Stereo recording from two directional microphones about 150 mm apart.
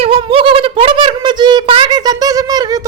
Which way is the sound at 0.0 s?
35° right (ahead or behind).